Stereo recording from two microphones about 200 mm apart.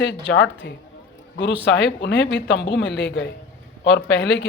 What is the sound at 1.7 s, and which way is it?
Speech, 65° left (ahead or behind).